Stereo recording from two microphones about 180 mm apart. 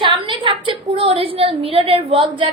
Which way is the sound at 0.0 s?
25° right (ahead or behind).